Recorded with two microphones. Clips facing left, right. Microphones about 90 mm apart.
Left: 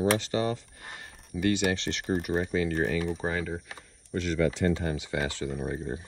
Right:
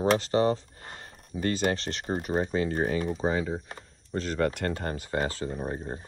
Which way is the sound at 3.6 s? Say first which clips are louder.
Even; 40° right (ahead or behind).